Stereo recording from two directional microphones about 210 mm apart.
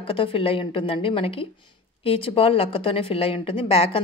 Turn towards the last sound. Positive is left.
turn(degrees=25)  # may be behind; listen again after turning